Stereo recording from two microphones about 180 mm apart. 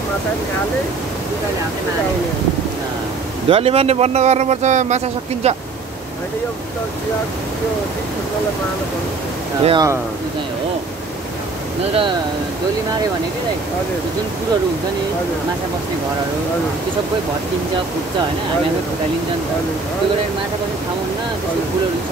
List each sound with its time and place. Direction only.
3.4 s speech: 35° right (ahead or behind)
9.6 s speech: 30° right (ahead or behind)